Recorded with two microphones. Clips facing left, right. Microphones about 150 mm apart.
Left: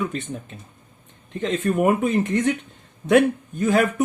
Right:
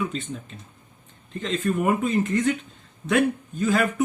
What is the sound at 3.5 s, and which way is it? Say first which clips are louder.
Speech: left 4 dB; 55° left (ahead or behind).